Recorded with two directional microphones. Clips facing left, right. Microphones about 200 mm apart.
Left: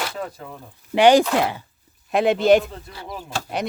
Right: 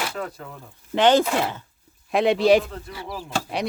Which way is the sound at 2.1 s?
Centre (ahead or behind).